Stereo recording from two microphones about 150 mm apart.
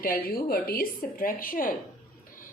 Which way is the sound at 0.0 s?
75° left (ahead or behind).